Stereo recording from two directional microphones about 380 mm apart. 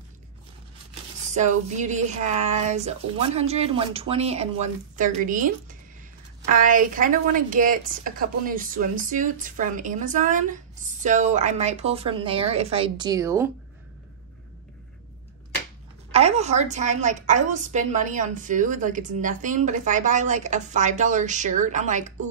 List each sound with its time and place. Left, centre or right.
1.3 s a woman's voice: centre
16.1 s a woman's voice: centre